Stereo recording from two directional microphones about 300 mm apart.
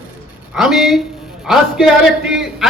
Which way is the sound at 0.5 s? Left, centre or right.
Centre.